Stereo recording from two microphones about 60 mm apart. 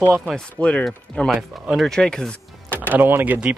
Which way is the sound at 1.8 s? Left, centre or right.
Centre.